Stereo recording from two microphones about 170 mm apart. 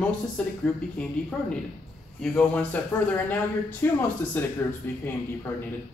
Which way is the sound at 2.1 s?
10° left (ahead or behind).